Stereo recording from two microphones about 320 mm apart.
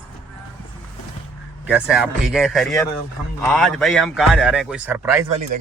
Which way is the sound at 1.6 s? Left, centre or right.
Centre.